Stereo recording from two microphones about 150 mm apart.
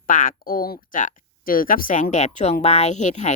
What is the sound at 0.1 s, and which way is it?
Speech, 65° left (ahead or behind).